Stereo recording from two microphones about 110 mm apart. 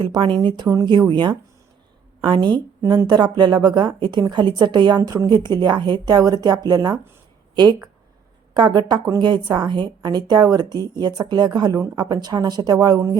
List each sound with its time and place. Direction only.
0.0 s speech: 50° right (ahead or behind)
2.8 s speech: 30° right (ahead or behind)
3.1 s a woman's voice: 40° right (ahead or behind)